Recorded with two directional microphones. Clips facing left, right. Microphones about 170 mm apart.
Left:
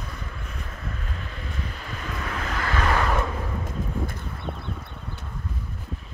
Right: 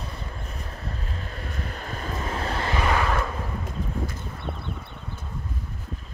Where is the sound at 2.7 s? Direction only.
15° right (ahead or behind).